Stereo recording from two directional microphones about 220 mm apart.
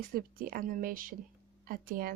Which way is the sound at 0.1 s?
40° right (ahead or behind).